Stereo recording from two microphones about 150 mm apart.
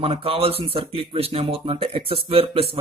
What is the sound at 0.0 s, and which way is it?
Speech, 40° right (ahead or behind).